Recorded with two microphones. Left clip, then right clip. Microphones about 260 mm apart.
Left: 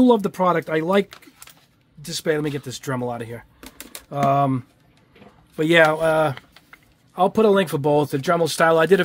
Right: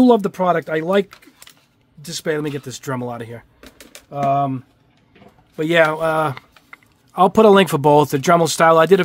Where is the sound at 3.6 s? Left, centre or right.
Left.